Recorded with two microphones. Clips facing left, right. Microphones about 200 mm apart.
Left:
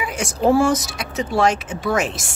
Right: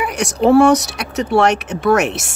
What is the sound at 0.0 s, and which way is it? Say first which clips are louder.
Speech: right 4 dB; 70° right (ahead or behind).